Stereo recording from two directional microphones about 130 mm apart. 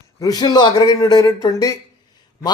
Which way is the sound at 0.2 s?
30° left (ahead or behind).